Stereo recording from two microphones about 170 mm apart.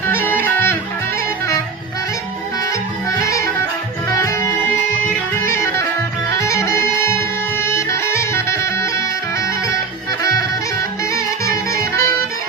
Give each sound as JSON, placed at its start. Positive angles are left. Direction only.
{"t": 0.1, "sound": "music", "side_deg": 10}
{"t": 3.1, "sound": "music", "side_deg": 20}
{"t": 5.5, "sound": "clarinet", "side_deg": 15}
{"t": 6.4, "sound": "music", "side_deg": 15}
{"t": 11.1, "sound": "music", "side_deg": 20}